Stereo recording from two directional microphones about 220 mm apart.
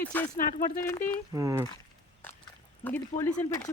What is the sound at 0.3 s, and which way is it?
Speech, 40° left (ahead or behind).